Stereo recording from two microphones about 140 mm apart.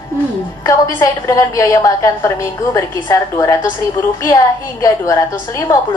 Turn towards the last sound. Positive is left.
turn(degrees=25)  # may be behind; listen again after turning